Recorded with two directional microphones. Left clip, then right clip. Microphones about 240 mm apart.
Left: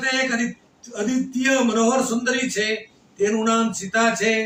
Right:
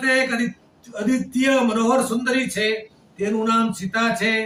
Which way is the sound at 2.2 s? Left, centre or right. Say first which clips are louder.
Right 1 dB; centre.